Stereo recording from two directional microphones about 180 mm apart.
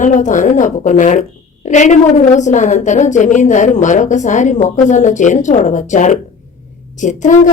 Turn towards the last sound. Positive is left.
turn(degrees=45)  # may be behind; listen again after turning